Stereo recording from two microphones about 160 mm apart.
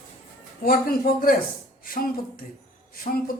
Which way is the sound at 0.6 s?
65° left (ahead or behind).